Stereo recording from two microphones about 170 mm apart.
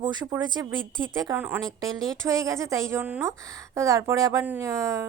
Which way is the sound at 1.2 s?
15° right (ahead or behind).